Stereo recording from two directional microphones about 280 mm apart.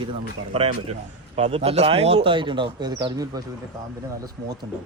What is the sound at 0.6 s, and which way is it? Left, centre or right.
A man's voice, right.